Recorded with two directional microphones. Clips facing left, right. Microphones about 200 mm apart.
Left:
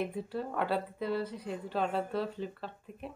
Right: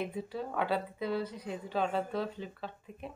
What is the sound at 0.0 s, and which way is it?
Speech, centre (ahead or behind).